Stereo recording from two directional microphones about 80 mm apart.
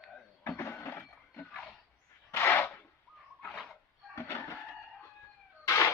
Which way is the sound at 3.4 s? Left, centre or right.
Centre.